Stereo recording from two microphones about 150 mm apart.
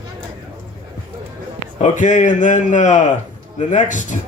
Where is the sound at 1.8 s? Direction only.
55° left (ahead or behind).